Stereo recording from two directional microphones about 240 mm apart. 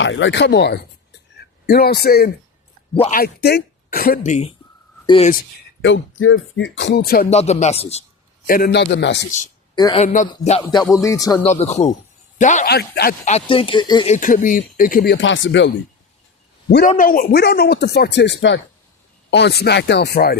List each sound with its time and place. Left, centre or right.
0.0 s speech: left
2.9 s speech: left
3.2 s speech: left
5.8 s music: left
8.4 s speech: left
9.7 s speech: centre
10.3 s music: left
11.4 s speech: left
14.1 s music: left
16.6 s a man's voice: left
16.9 s music: left
19.3 s speech: left